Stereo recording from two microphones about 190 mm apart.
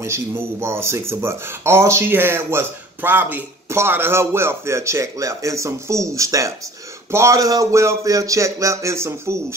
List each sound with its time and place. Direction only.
0.0 s speech: 15° right (ahead or behind)